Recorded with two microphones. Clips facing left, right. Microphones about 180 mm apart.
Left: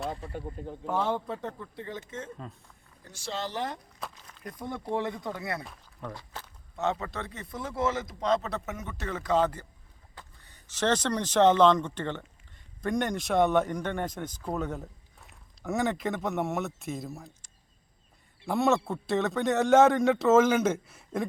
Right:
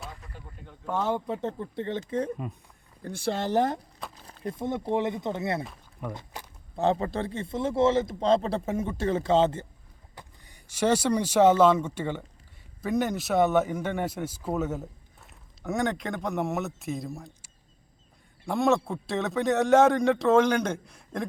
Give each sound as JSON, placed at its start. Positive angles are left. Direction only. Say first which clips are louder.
{"t": 0.1, "sound": "a sound", "louder": "left 9 dB", "side_deg": 30}
{"t": 0.4, "sound": "speech", "louder": "left 10 dB", "side_deg": 35}
{"t": 1.0, "sound": "a man's voice", "louder": "right 2 dB", "side_deg": -10}
{"t": 1.4, "sound": "a man's voice", "louder": "right 6 dB", "side_deg": -25}
{"t": 3.0, "sound": "speech", "louder": "right 6 dB", "side_deg": -55}
{"t": 4.1, "sound": "speech", "louder": "right 8 dB", "side_deg": -30}
{"t": 6.0, "sound": "speech", "louder": "right 3 dB", "side_deg": -10}
{"t": 6.7, "sound": "a man's voice", "louder": "right 5 dB", "side_deg": -30}
{"t": 10.2, "sound": "speech", "louder": "right 3 dB", "side_deg": -15}